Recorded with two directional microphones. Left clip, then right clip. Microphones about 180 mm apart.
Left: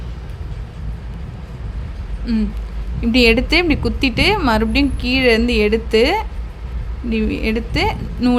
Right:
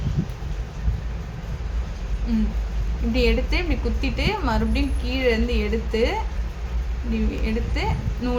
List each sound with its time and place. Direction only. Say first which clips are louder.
2.3 s speech: left 5 dB; 50° left (ahead or behind)
3.1 s a woman's voice: left 10 dB; 60° left (ahead or behind)